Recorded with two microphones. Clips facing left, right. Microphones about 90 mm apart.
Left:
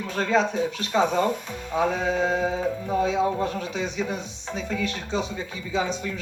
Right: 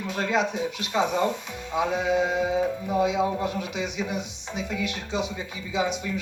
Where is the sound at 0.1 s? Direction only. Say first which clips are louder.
Left 3 dB; 10° right (ahead or behind).